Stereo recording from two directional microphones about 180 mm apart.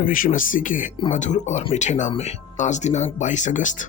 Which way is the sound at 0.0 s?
50° left (ahead or behind).